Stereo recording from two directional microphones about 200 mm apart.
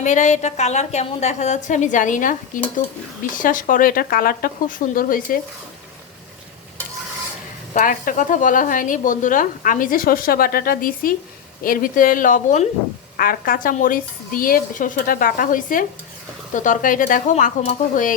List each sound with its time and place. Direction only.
0.0 s a woman's voice: 40° left (ahead or behind)
7.7 s a woman's voice: 40° left (ahead or behind)